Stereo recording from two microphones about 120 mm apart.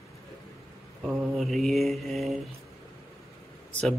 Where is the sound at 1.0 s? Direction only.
Centre (ahead or behind).